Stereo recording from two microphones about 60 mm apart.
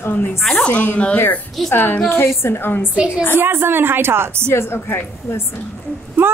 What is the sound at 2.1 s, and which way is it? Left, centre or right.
Speech, left.